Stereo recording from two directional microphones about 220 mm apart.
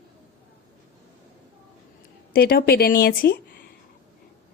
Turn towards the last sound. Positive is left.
turn(degrees=45)  # may be behind; listen again after turning